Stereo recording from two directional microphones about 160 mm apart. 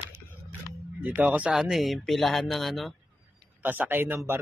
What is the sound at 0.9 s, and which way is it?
Speech, 10° right (ahead or behind).